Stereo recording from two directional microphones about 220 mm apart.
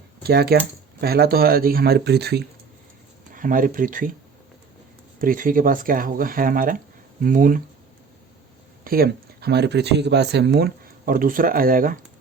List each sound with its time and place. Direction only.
0.2 s speech: 45° right (ahead or behind)
5.2 s speech: 40° right (ahead or behind)
8.8 s speech: 40° right (ahead or behind)